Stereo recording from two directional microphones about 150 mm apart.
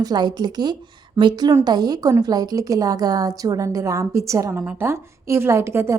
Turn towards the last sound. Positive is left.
turn(degrees=-20)  # may be behind; listen again after turning